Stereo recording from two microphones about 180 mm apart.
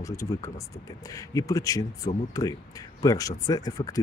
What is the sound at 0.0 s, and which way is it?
Speech, 15° left (ahead or behind).